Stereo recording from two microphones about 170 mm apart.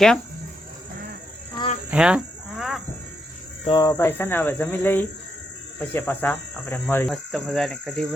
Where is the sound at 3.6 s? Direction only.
25° left (ahead or behind).